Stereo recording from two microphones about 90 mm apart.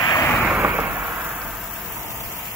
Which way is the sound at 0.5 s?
20° right (ahead or behind).